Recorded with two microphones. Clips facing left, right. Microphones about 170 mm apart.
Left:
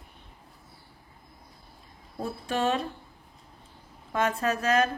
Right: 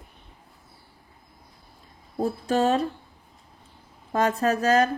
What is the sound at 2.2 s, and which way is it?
Speech, 40° right (ahead or behind).